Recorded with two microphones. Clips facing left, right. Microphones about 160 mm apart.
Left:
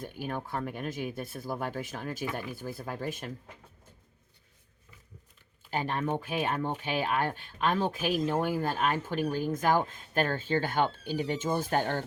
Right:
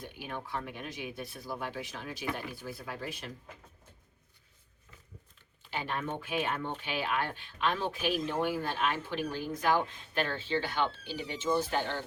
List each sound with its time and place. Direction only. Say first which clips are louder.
0.0 s speech: left 5 dB; 45° left (ahead or behind)
5.7 s speech: left 5 dB; 40° left (ahead or behind)